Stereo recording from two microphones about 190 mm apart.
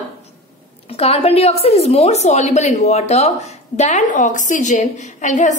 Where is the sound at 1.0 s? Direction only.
30° left (ahead or behind).